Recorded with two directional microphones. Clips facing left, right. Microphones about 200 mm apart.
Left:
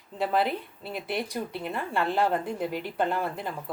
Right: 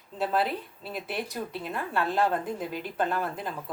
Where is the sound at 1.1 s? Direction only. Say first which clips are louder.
Left 3 dB; 15° left (ahead or behind).